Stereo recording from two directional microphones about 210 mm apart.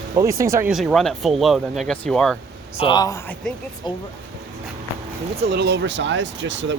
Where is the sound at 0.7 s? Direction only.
Centre (ahead or behind).